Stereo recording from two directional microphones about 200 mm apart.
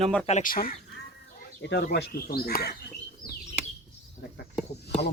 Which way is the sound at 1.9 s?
50° left (ahead or behind).